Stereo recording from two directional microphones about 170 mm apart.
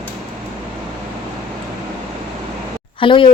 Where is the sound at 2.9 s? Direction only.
30° left (ahead or behind).